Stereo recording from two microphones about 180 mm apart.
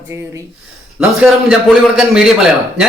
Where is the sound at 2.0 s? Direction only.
5° right (ahead or behind).